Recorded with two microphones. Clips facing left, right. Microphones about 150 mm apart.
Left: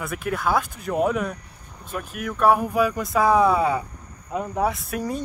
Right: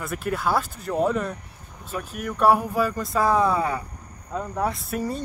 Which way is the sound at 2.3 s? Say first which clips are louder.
Even; 5° right (ahead or behind).